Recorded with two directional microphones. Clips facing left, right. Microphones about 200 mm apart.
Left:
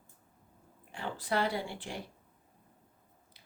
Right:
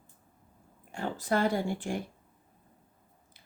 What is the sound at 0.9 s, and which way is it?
Speech, 45° right (ahead or behind).